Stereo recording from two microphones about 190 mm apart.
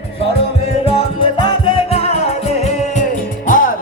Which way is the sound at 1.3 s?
25° left (ahead or behind).